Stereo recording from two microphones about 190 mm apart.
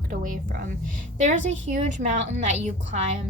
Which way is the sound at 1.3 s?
80° right.